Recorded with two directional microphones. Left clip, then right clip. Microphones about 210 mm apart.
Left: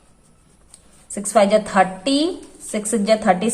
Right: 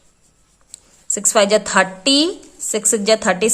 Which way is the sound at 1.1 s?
35° right (ahead or behind).